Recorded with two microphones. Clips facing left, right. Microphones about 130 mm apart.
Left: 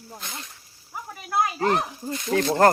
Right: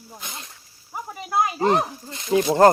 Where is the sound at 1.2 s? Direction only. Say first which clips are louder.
Right 2 dB; 20° right (ahead or behind).